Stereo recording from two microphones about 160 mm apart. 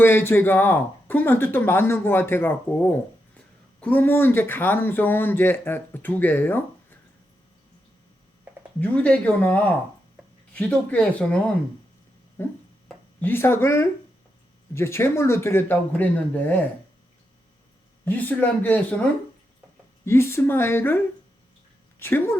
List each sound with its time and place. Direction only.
0.0 s speech: 15° left (ahead or behind)
8.8 s speech: 10° left (ahead or behind)
13.1 s speech: 15° left (ahead or behind)
18.0 s speech: 10° left (ahead or behind)
20.1 s speech: 15° left (ahead or behind)